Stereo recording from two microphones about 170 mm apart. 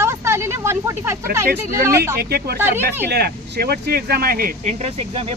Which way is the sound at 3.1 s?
70° right (ahead or behind).